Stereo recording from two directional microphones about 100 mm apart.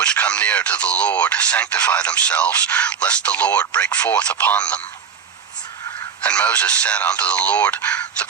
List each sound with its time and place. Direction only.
0.0 s speech: 10° left (ahead or behind)
6.2 s speech: 10° left (ahead or behind)